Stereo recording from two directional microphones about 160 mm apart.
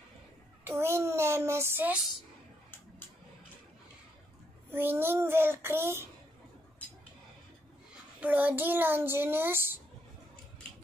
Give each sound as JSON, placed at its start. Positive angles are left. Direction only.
{"t": 0.7, "sound": "child singing", "side_deg": -15}
{"t": 4.6, "sound": "a child's voice", "side_deg": -15}
{"t": 8.2, "sound": "a child's voice", "side_deg": -10}